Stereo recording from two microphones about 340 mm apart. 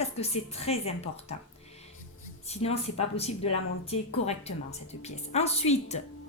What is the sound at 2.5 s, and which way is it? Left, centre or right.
Speech, centre.